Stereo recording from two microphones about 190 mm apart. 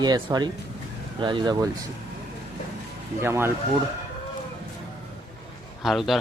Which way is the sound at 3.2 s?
10° right (ahead or behind).